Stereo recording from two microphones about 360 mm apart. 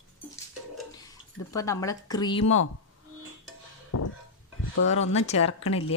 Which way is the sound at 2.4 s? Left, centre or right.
Left.